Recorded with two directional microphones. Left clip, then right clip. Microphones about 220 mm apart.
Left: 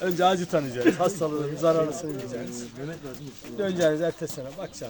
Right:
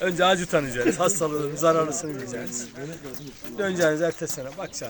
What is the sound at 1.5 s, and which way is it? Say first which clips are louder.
Speech: right 2 dB; centre (ahead or behind).